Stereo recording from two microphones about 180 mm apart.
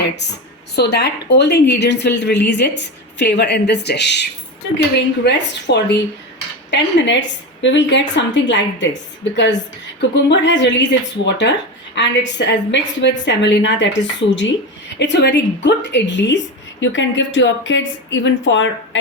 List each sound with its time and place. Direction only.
0.8 s a woman's voice: 70° left (ahead or behind)
6.7 s a woman's voice: 85° left
14.9 s a woman's voice: 75° left (ahead or behind)